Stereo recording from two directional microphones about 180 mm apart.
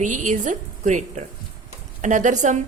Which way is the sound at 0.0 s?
45° right (ahead or behind).